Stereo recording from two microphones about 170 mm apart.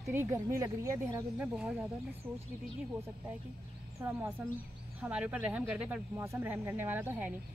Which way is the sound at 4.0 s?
10° right (ahead or behind).